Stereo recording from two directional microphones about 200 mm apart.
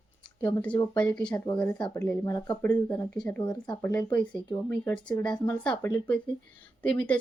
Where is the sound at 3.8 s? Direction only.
10° left (ahead or behind).